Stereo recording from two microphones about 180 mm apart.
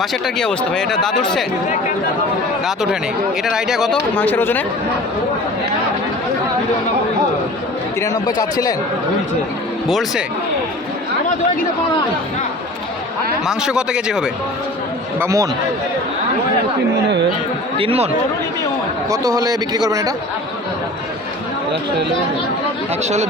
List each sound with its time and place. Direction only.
0.0 s speech: centre (ahead or behind)
2.6 s speech: 5° right (ahead or behind)
4.1 s speech: 10° left (ahead or behind)
8.0 s speech: 20° left (ahead or behind)
9.9 s speech: centre (ahead or behind)
13.5 s speech: 5° right (ahead or behind)
15.2 s a man's voice: 15° right (ahead or behind)
17.7 s speech: 35° right (ahead or behind)
19.1 s a man's voice: 20° right (ahead or behind)